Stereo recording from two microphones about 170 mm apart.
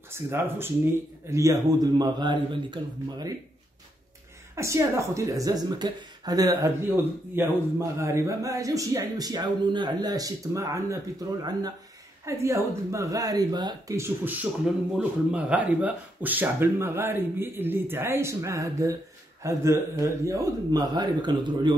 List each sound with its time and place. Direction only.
0.1 s a woman's voice: 15° right (ahead or behind)
4.6 s a woman's voice: 15° right (ahead or behind)